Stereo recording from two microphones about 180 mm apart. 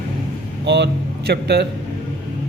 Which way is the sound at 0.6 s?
75° right (ahead or behind).